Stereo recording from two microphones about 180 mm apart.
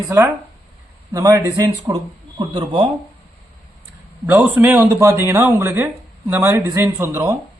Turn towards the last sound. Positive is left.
turn(degrees=-15)  # may be behind; listen again after turning